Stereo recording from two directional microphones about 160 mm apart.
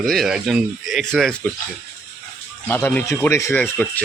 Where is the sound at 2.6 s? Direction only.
10° left (ahead or behind).